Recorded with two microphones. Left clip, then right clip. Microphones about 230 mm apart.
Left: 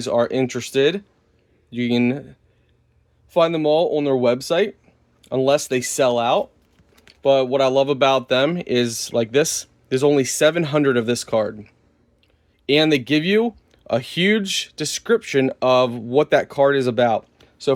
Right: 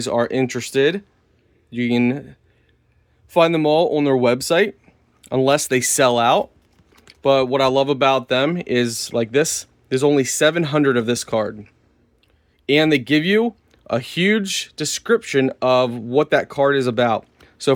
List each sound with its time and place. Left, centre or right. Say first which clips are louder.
0.0 s speech: even; centre
3.2 s speech: right 2 dB; right